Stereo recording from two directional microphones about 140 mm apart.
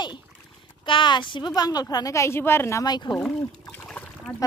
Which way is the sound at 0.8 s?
35° left (ahead or behind).